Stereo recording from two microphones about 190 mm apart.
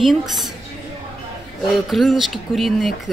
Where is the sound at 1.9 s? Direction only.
Centre (ahead or behind).